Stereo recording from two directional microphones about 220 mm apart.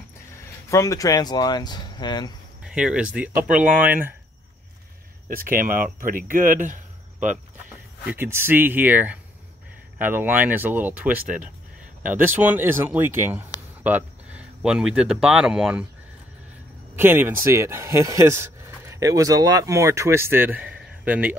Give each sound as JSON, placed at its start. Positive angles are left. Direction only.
{"t": 0.7, "sound": "speech", "side_deg": 15}
{"t": 2.6, "sound": "speech", "side_deg": -5}
{"t": 5.3, "sound": "speech", "side_deg": -40}
{"t": 8.1, "sound": "speech", "side_deg": -10}
{"t": 16.9, "sound": "speech", "side_deg": -10}